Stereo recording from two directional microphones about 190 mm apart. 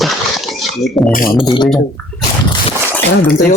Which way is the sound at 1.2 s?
20° left (ahead or behind).